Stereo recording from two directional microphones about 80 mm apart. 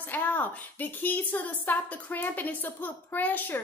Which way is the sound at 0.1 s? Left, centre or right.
Left.